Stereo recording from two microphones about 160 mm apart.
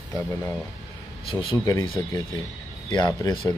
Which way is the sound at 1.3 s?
35° left (ahead or behind).